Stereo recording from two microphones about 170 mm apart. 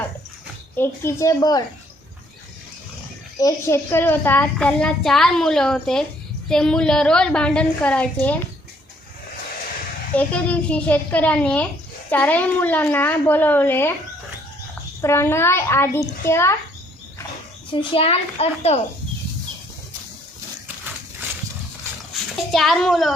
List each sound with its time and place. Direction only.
0.8 s a woman's voice: 15° left (ahead or behind)
3.3 s a child's voice: 20° left (ahead or behind)
10.2 s a woman's voice: 10° left (ahead or behind)
15.0 s a woman's voice: 15° left (ahead or behind)
17.7 s a child's voice: 30° left (ahead or behind)
22.5 s a child's voice: centre (ahead or behind)